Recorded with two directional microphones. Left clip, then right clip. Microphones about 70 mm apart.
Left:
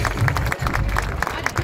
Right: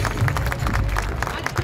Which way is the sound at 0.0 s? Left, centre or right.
Left.